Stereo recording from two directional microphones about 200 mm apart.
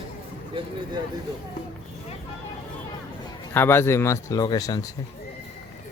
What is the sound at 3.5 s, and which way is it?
Speech, 10° left (ahead or behind).